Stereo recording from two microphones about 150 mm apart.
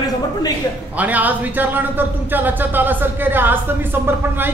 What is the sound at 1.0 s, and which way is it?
Speech, 10° right (ahead or behind).